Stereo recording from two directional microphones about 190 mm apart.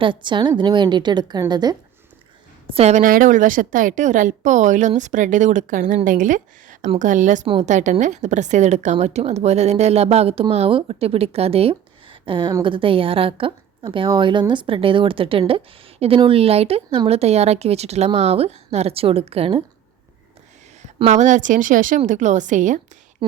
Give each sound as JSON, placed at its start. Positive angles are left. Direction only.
{"t": 0.0, "sound": "a woman's voice", "side_deg": -25}
{"t": 2.6, "sound": "a woman's voice", "side_deg": -35}
{"t": 20.8, "sound": "a woman's voice", "side_deg": -35}